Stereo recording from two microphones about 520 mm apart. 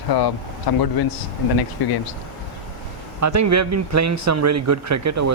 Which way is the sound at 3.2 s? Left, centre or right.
Right.